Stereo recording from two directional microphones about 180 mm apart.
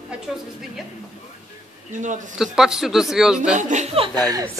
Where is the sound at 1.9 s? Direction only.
45° right (ahead or behind).